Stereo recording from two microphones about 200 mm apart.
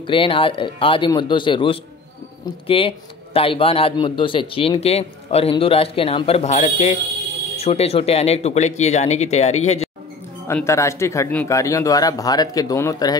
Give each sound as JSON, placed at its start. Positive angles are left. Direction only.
{"t": 0.0, "sound": "a man's voice", "side_deg": 25}
{"t": 10.5, "sound": "speech", "side_deg": 15}